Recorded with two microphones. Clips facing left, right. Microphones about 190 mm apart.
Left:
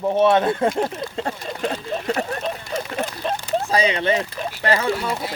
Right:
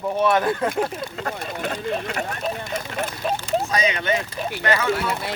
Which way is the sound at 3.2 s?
5° right (ahead or behind).